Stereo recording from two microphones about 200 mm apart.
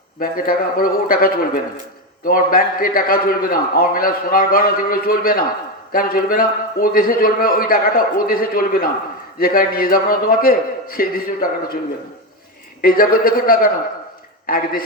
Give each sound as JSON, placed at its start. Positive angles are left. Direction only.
{"t": 0.2, "sound": "a man's voice", "side_deg": 45}
{"t": 12.8, "sound": "a man's voice", "side_deg": 45}